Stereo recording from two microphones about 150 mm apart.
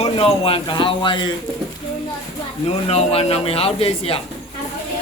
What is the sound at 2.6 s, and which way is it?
Speech, 40° left (ahead or behind).